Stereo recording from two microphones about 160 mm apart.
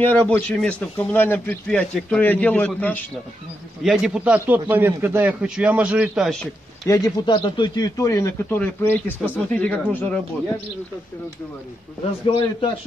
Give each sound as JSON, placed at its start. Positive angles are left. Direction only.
{"t": 0.0, "sound": "speech", "side_deg": 10}
{"t": 3.8, "sound": "a man's voice", "side_deg": -5}
{"t": 6.9, "sound": "a man's voice", "side_deg": 25}
{"t": 12.0, "sound": "a man's voice", "side_deg": 35}